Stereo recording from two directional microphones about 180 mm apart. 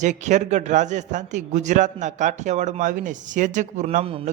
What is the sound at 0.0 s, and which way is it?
A man's voice, 40° right (ahead or behind).